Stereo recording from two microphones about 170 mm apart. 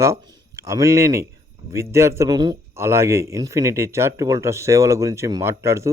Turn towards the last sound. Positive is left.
turn(degrees=-15)  # may be behind; listen again after turning